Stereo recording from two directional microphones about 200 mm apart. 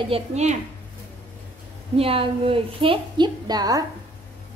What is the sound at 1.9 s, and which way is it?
A woman's voice, 30° right (ahead or behind).